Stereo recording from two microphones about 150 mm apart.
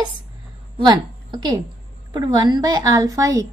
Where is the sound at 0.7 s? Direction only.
25° right (ahead or behind).